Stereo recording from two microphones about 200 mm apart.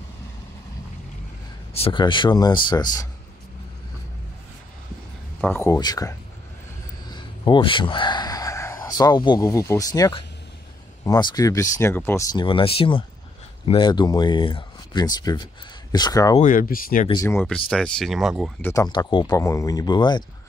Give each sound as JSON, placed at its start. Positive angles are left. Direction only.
{"t": 1.7, "sound": "speech", "side_deg": 25}
{"t": 5.4, "sound": "speech", "side_deg": 10}
{"t": 7.1, "sound": "a sound", "side_deg": 25}
{"t": 11.1, "sound": "speech", "side_deg": 20}
{"t": 16.3, "sound": "speech", "side_deg": 45}
{"t": 17.1, "sound": "speech", "side_deg": 15}
{"t": 18.6, "sound": "speech", "side_deg": 15}